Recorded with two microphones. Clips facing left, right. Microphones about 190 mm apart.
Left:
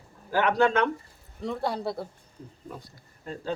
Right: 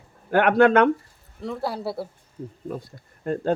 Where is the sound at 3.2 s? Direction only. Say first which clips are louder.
Right 11 dB; 55° right (ahead or behind).